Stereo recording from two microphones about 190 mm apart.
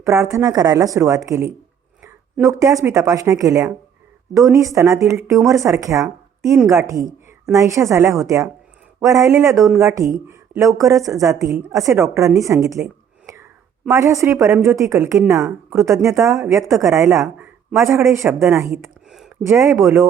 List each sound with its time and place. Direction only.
0.0 s a woman's voice: 15° right (ahead or behind)
18.8 s a sound: centre (ahead or behind)
19.5 s speech: 15° right (ahead or behind)